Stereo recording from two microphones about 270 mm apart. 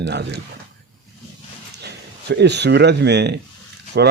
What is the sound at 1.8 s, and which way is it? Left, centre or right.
Speech, right.